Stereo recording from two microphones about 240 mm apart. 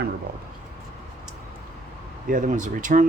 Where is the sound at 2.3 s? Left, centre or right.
Right.